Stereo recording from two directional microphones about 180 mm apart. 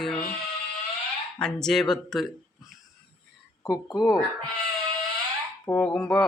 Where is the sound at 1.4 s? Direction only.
5° left (ahead or behind).